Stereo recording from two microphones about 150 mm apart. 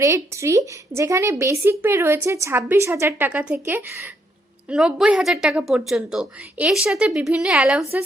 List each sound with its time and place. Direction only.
0.0 s a woman's voice: 20° right (ahead or behind)
4.7 s a woman's voice: 5° right (ahead or behind)